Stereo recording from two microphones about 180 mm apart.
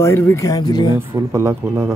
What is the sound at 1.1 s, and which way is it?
Speech, 15° right (ahead or behind).